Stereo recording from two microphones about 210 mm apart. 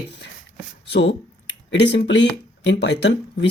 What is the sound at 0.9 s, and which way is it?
Speech, 55° left (ahead or behind).